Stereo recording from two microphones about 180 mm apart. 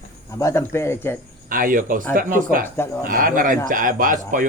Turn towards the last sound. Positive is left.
turn(degrees=-45)  # may be behind; listen again after turning